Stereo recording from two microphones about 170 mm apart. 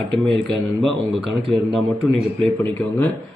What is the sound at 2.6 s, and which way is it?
Speech, 10° left (ahead or behind).